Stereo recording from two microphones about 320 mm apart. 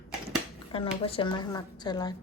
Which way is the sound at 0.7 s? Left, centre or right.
Centre.